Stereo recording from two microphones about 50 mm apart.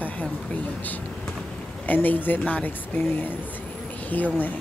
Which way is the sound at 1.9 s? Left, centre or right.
Left.